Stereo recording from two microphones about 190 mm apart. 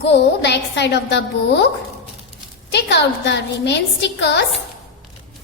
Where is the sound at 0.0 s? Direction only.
65° left (ahead or behind).